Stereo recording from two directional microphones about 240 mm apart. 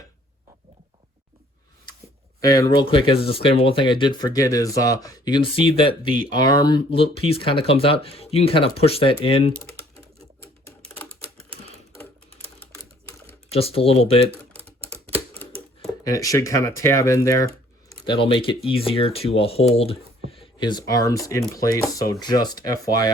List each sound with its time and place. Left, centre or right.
2.4 s speech: centre
10.7 s typewriter: centre
11.3 s typewriter: right
12.7 s typewriter: centre
13.5 s speech: left
16.0 s speech: centre